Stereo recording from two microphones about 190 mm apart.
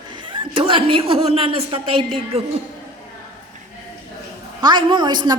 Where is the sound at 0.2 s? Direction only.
25° right (ahead or behind).